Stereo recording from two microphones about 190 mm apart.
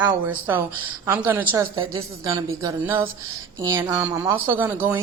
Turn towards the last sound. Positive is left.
turn(degrees=-10)  # may be behind; listen again after turning